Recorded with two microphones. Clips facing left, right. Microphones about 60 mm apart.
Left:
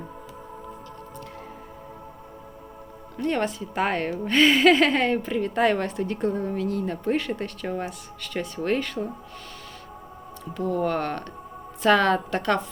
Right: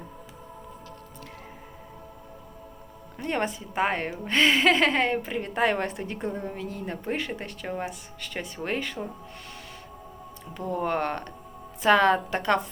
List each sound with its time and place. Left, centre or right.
3.2 s speech: centre
10.7 s speech: right